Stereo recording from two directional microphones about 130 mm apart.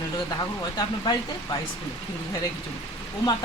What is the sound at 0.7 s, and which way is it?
Speech, 35° left (ahead or behind).